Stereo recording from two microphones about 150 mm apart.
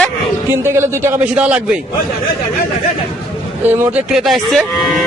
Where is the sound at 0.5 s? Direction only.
15° right (ahead or behind).